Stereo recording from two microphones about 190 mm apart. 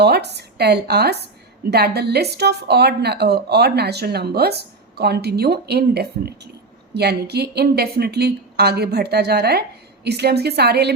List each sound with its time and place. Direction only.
0.0 s a woman's voice: 60° right (ahead or behind)